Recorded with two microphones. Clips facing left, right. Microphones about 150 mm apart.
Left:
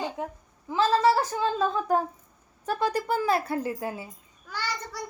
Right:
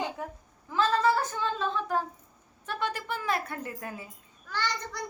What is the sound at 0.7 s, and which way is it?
A woman's voice, 30° left (ahead or behind).